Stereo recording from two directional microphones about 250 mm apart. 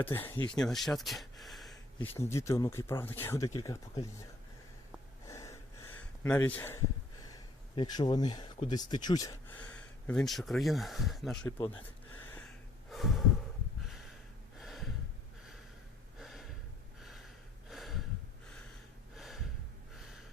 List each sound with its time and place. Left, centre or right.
0.0 s speech: centre
2.1 s speech: centre
5.2 s gasp: centre
7.8 s speech: centre
11.4 s speech: centre
12.9 s gasp: centre
14.6 s gasp: centre
16.1 s gasp: centre
17.0 s a sound: centre
19.1 s gasp: centre